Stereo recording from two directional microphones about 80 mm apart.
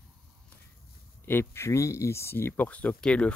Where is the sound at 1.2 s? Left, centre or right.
Left.